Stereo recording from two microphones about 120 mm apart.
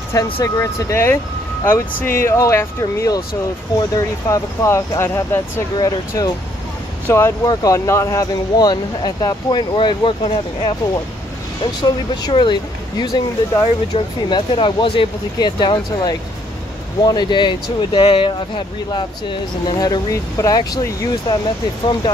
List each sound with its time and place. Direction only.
0.1 s speech: 25° left (ahead or behind)
5.8 s speech: 35° left (ahead or behind)
7.1 s speech: 20° left (ahead or behind); by 10.7 s 45° left (ahead or behind)
11.8 s speech: 35° left (ahead or behind)
13.9 s speech: 45° left (ahead or behind)
19.8 s speech: 30° left (ahead or behind)